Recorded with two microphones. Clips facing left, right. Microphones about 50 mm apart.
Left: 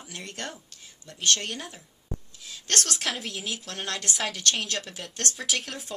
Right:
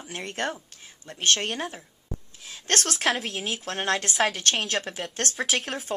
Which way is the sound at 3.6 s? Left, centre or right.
Right.